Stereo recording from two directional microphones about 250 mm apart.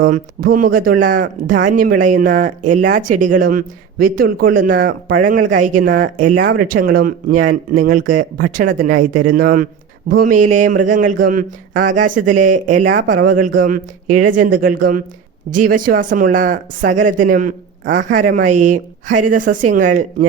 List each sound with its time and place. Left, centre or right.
0.0 s speech: right